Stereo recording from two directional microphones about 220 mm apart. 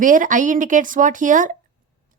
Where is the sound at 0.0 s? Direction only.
35° right (ahead or behind).